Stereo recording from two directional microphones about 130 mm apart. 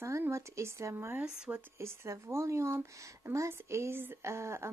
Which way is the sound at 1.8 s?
20° right (ahead or behind).